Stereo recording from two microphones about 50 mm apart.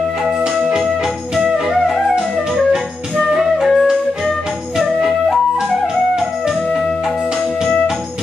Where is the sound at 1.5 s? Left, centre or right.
Centre.